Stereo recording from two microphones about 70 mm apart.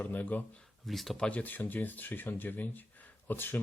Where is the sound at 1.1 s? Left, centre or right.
Centre.